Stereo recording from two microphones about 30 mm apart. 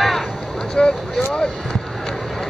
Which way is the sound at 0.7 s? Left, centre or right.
Left.